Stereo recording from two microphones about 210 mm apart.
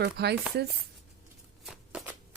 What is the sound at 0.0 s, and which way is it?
Speech, 50° right (ahead or behind).